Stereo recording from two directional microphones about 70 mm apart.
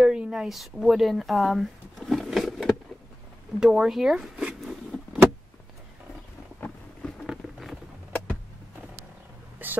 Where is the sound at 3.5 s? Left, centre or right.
Centre.